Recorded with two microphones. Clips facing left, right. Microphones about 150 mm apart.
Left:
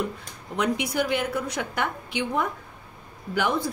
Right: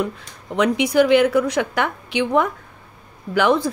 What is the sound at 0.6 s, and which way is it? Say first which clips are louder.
Speech: right 9 dB; 90° right.